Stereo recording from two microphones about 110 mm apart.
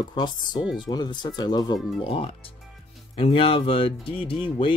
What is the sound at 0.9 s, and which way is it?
Speech, 40° left (ahead or behind).